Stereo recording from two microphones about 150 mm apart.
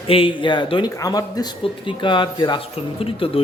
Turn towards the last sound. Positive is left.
turn(degrees=40)  # may be behind; listen again after turning